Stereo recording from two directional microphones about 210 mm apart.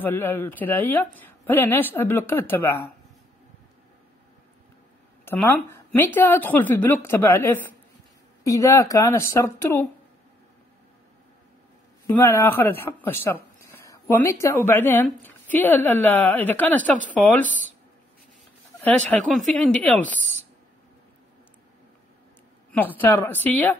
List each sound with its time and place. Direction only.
0.0 s speech: 10° left (ahead or behind)
5.2 s speech: 10° left (ahead or behind)
12.1 s speech: 10° left (ahead or behind)
18.8 s speech: 5° left (ahead or behind)
22.7 s speech: 10° left (ahead or behind)